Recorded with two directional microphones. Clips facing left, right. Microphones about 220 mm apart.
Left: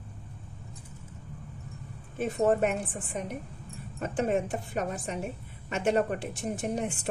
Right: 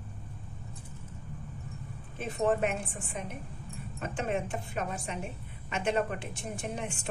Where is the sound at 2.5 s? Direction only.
40° left (ahead or behind).